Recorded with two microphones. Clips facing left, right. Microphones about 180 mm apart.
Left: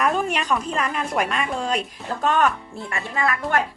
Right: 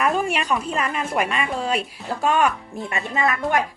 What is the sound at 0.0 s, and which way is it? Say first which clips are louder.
A woman's voice: right 1 dB; 5° right (ahead or behind).